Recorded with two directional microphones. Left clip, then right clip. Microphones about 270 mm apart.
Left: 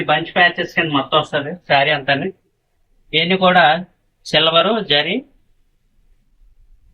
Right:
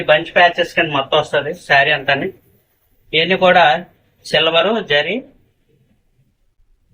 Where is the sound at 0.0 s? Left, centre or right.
Right.